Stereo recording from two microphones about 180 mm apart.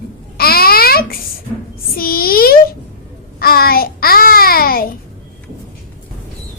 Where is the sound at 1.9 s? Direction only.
55° left (ahead or behind).